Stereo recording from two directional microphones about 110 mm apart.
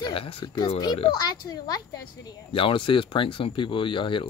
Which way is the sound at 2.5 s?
55° left (ahead or behind).